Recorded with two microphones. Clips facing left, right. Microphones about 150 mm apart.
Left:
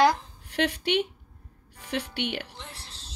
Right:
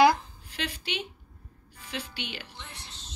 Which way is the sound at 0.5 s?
65° left (ahead or behind).